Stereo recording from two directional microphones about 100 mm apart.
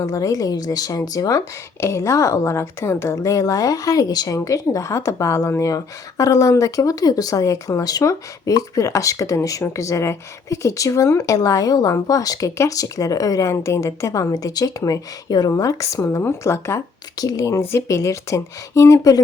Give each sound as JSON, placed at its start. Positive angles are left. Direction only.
{"t": 0.0, "sound": "a woman's voice", "side_deg": 35}